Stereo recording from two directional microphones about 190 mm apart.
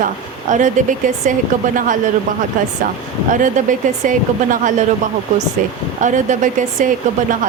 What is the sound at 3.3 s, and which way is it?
Speech, 40° right (ahead or behind).